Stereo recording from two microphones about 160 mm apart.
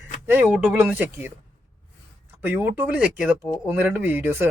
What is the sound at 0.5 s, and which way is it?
Speech, 5° right (ahead or behind).